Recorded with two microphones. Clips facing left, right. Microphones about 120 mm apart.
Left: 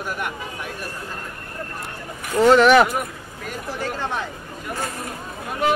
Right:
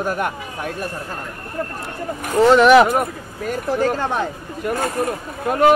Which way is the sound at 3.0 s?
45° right (ahead or behind).